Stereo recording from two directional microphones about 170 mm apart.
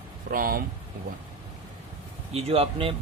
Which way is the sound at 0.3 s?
60° right (ahead or behind).